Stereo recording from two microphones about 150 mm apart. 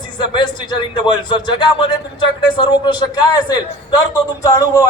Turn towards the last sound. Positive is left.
turn(degrees=25)  # may be behind; listen again after turning